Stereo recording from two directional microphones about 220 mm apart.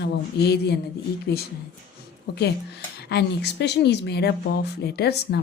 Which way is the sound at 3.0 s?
50° left (ahead or behind).